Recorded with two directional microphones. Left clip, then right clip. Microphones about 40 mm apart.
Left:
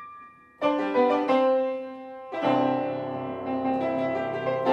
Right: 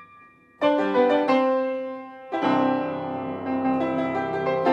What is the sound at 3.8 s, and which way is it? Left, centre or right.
Music, right.